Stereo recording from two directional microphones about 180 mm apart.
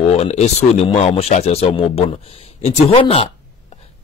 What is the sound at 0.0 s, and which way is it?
Speech, 35° left (ahead or behind).